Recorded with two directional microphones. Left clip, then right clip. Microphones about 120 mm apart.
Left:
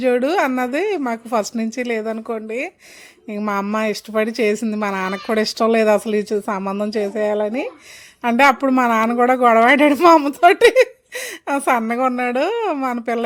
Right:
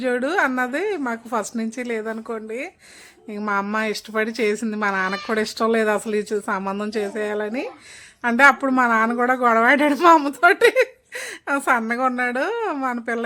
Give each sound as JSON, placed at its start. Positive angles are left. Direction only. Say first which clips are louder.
{"t": 0.0, "sound": "a woman's voice", "louder": "left 4 dB", "side_deg": 40}
{"t": 10.4, "sound": "a woman's voice", "louder": "left 4 dB", "side_deg": 40}